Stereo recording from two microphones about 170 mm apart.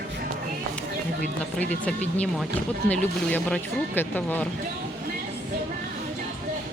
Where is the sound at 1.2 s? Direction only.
45° right (ahead or behind).